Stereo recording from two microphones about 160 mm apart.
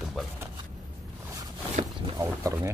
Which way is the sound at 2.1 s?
15° right (ahead or behind).